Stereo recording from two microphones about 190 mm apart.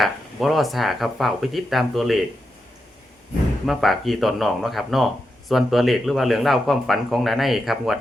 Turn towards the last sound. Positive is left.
turn(degrees=0)  # may be behind; listen again after turning